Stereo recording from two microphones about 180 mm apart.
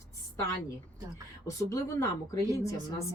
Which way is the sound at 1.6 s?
15° left (ahead or behind).